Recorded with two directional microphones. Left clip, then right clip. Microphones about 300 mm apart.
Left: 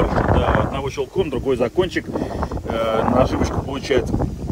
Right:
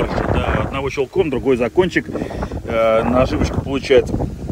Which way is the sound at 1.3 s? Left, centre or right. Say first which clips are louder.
Right 2 dB; right.